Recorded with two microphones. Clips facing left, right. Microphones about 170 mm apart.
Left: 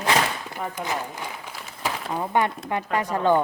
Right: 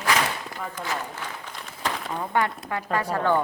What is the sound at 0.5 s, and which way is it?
Run, 15° left (ahead or behind).